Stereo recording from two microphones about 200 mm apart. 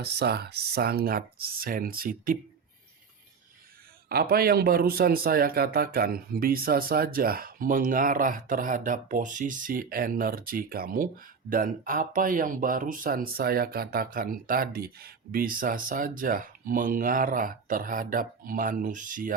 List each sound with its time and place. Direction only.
0.0 s a man's voice: 55° right (ahead or behind)
4.1 s a man's voice: 50° right (ahead or behind)